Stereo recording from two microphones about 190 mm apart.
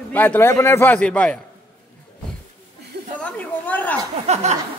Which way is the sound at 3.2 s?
10° left (ahead or behind).